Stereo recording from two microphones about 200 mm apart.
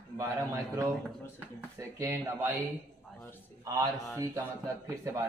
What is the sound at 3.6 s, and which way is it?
A man's voice, 20° right (ahead or behind).